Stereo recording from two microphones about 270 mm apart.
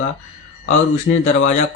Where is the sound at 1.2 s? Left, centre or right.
Left.